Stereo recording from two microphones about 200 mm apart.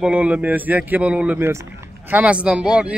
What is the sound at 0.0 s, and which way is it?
A man's voice, 5° right (ahead or behind).